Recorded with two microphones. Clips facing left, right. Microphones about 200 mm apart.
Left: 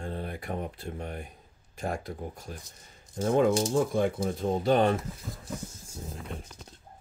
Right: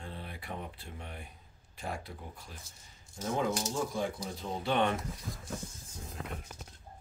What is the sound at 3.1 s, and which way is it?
Speech, 55° left (ahead or behind).